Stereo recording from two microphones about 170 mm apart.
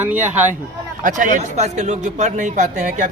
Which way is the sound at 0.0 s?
10° right (ahead or behind).